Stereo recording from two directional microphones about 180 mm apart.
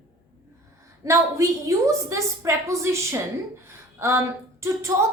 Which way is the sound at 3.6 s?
15° right (ahead or behind).